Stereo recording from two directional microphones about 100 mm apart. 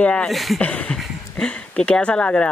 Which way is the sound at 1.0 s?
10° left (ahead or behind).